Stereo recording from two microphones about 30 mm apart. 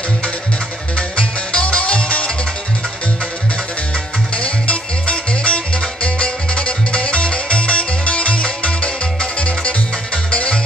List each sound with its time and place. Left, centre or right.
1.1 s music: left
4.4 s music: left
10.3 s music: left